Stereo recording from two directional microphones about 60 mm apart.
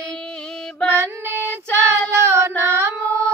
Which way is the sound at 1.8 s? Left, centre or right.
Right.